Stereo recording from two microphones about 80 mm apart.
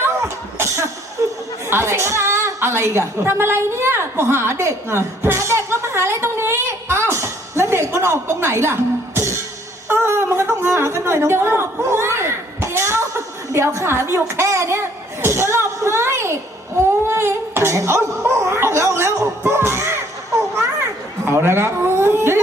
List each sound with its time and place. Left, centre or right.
1.2 s chatter: right
1.7 s a woman's voice: right
19.4 s music: right
21.2 s speech: right